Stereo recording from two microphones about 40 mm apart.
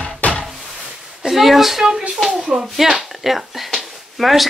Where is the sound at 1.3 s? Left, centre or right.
Centre.